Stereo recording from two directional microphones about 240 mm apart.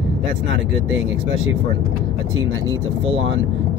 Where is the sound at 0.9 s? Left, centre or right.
Right.